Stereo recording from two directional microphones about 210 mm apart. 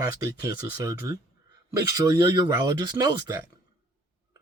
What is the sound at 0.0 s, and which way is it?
Speech, 15° right (ahead or behind).